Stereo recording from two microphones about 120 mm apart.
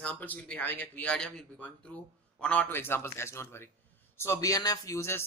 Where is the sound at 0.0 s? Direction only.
15° left (ahead or behind).